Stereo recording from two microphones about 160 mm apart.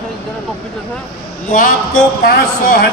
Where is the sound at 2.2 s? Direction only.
70° left (ahead or behind).